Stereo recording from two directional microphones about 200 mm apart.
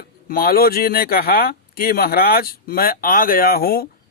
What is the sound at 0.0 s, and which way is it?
Speech, 45° left (ahead or behind).